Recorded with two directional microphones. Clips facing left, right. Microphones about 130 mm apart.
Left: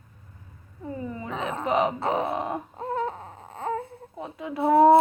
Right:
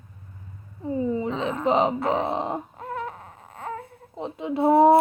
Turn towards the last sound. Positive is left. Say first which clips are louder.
# right 1 dB
turn(degrees=-25)  # may be behind; listen again after turning